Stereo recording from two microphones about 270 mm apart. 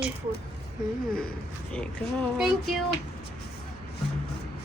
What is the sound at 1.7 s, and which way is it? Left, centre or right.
Speech, centre.